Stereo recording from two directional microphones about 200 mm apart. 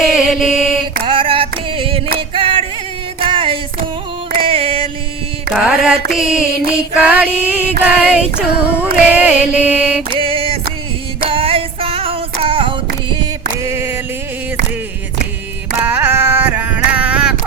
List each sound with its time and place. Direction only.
0.1 s mantra: 5° right (ahead or behind)
1.0 s clapping: 25° right (ahead or behind)
2.1 s singing: 25° right (ahead or behind)
3.2 s music: 25° right (ahead or behind)
4.4 s a sound: 30° right (ahead or behind)
5.5 s music: 5° right (ahead or behind)
6.9 s female singing: 5° right (ahead or behind)
10.2 s music: 25° right (ahead or behind)
11.3 s female singing: 25° right (ahead or behind)
13.6 s a sound: 15° right (ahead or behind)
15.8 s a sound: 10° right (ahead or behind)